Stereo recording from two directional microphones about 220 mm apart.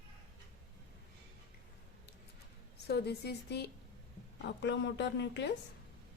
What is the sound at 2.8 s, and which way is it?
A woman's voice, 50° left (ahead or behind).